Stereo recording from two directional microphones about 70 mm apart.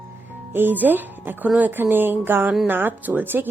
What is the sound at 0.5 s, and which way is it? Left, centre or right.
Speech, right.